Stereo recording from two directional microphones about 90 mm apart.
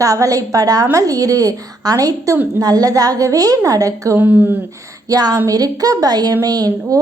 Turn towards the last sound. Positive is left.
turn(degrees=-45)  # may be behind; listen again after turning